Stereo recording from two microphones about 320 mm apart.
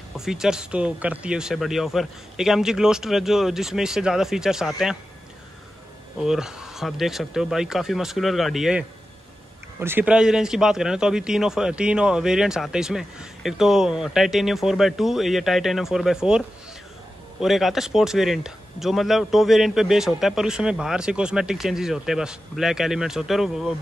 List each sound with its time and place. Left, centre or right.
0.2 s speech: centre
6.1 s speech: centre